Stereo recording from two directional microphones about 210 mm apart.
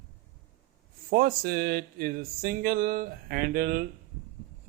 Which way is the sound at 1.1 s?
45° right (ahead or behind).